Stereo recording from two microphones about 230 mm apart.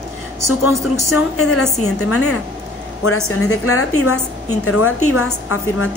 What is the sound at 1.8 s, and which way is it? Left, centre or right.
A woman's voice, left.